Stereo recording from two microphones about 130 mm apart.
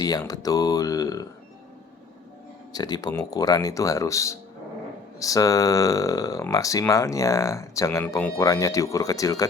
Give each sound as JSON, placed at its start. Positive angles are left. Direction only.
{"t": 0.0, "sound": "speech", "side_deg": 30}
{"t": 2.7, "sound": "speech", "side_deg": 30}